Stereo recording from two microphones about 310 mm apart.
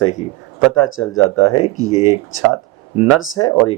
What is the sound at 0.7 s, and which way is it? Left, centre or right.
Speech, left.